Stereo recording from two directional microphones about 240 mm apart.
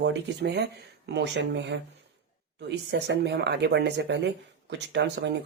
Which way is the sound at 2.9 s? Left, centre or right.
Right.